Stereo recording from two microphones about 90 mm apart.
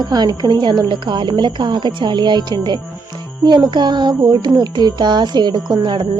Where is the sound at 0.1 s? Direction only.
50° right (ahead or behind).